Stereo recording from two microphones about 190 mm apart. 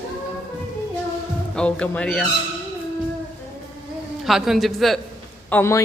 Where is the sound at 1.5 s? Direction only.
5° left (ahead or behind).